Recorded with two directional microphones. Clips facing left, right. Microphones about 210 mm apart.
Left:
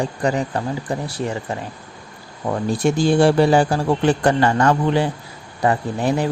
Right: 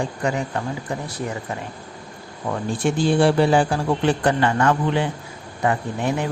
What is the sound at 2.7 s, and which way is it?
Speech, 40° left (ahead or behind).